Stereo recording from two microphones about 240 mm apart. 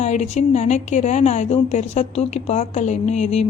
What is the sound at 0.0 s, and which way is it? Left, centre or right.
Speech, left.